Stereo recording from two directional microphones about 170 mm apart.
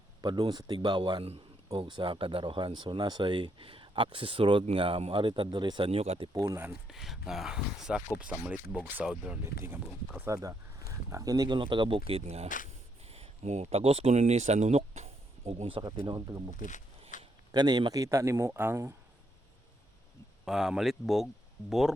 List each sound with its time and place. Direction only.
0.2 s speech: 25° right (ahead or behind)
6.3 s a man's voice: 20° right (ahead or behind)
6.8 s a man's voice: centre (ahead or behind); by 16.4 s 20° right (ahead or behind)
16.6 s speech: 45° left (ahead or behind)
17.1 s a sound: 50° left (ahead or behind)
17.5 s a man's voice: 25° right (ahead or behind)
20.4 s speech: 5° right (ahead or behind)